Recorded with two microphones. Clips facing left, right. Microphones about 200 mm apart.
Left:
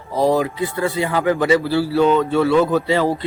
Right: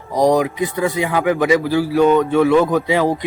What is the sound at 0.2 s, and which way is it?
Speech, 15° right (ahead or behind).